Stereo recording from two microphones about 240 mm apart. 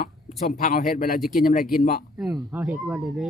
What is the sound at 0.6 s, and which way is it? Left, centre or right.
Speech, left.